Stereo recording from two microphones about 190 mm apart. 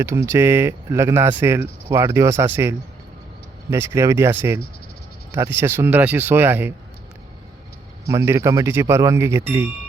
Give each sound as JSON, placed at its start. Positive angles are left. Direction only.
{"t": 0.0, "sound": "speech", "side_deg": -15}
{"t": 8.0, "sound": "speech", "side_deg": -15}